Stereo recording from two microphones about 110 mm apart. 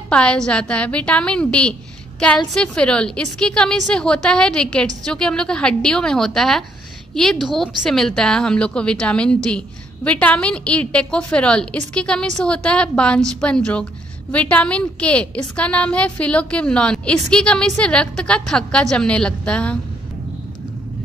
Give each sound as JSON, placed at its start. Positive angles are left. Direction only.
{"t": 0.1, "sound": "a woman's voice", "side_deg": 10}